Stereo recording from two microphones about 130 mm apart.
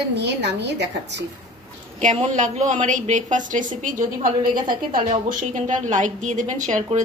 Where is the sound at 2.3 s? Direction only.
70° right (ahead or behind).